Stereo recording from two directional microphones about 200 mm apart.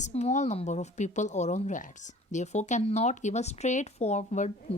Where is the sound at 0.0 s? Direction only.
35° left (ahead or behind).